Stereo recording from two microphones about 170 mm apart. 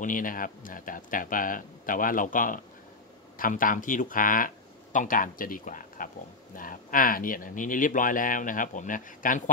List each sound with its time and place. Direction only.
0.0 s speech: 55° left (ahead or behind)